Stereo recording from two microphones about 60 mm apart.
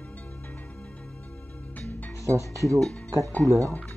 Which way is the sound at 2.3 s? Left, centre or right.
Left.